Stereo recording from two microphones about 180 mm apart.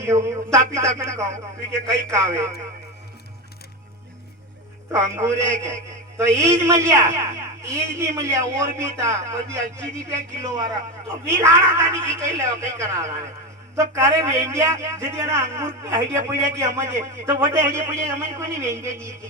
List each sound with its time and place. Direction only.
0.0 s a sound: 15° right (ahead or behind)
0.9 s a man's voice: 15° right (ahead or behind)
4.9 s a man's voice: 15° right (ahead or behind)